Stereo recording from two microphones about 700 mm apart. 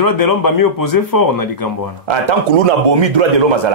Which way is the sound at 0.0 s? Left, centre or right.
Left.